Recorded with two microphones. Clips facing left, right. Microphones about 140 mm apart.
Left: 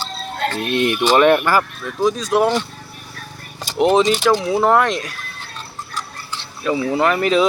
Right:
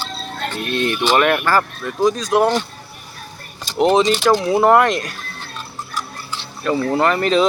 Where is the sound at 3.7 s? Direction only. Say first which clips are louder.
Even; 5° left (ahead or behind).